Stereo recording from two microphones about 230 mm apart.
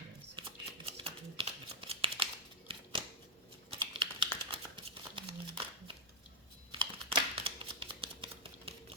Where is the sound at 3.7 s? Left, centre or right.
Right.